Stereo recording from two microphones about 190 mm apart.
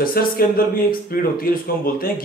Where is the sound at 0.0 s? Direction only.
50° left (ahead or behind).